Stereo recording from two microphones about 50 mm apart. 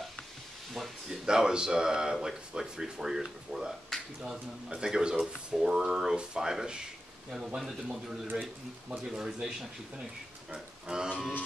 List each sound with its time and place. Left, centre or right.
1.2 s speech: centre